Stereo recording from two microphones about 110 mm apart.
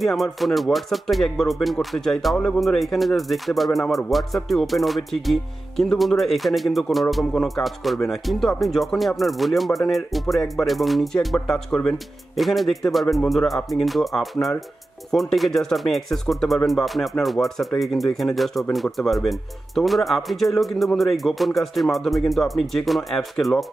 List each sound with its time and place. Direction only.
0.0 s speech: centre (ahead or behind)